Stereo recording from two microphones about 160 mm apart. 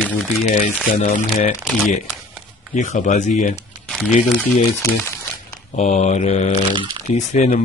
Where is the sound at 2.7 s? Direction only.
50° left (ahead or behind).